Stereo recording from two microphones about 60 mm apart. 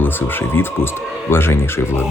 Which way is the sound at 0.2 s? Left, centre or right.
Left.